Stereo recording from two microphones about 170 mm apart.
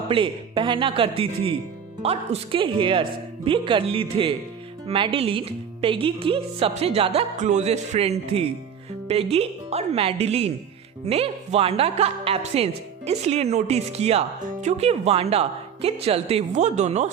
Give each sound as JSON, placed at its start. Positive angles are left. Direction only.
{"t": 0.1, "sound": "speech", "side_deg": -30}